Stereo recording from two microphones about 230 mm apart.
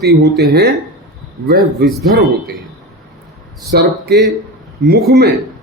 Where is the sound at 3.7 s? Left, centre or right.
Right.